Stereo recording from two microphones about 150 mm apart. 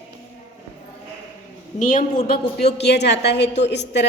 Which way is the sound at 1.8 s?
60° left (ahead or behind).